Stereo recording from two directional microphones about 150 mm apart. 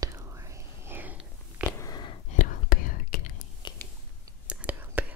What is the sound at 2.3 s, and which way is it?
Whispering, 60° left (ahead or behind).